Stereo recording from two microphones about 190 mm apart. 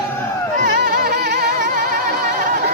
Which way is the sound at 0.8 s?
60° right (ahead or behind).